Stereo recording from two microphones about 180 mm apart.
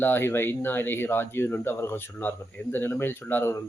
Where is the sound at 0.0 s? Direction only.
10° left (ahead or behind).